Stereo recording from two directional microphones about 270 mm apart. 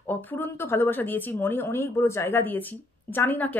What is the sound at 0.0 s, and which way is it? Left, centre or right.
Speech, centre.